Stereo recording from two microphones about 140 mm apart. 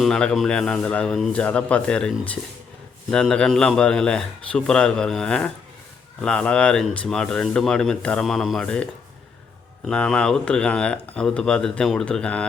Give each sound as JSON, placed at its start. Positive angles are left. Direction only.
{"t": 0.0, "sound": "speech", "side_deg": 5}